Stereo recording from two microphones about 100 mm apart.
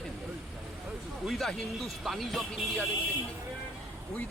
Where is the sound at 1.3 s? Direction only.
5° left (ahead or behind).